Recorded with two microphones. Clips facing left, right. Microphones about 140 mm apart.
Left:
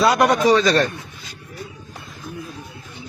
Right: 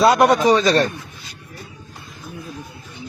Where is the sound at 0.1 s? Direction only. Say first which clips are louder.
Right 1 dB; 50° right (ahead or behind).